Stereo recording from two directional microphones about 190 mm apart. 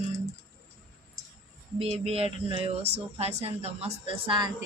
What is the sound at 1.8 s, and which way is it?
Speech, 30° right (ahead or behind).